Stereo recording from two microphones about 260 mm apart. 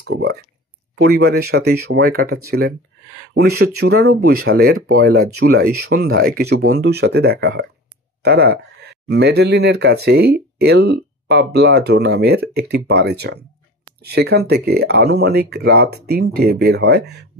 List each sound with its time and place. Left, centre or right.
0.1 s a sound: right
0.9 s speech: right
6.6 s speech: right
6.9 s speech: right